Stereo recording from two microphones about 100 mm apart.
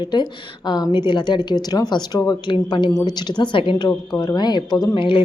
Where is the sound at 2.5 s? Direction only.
55° left (ahead or behind).